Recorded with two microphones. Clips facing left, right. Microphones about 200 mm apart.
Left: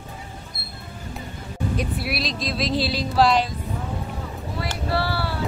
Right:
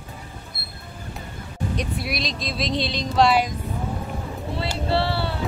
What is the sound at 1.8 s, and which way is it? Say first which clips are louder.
Speech: even; 5° left (ahead or behind).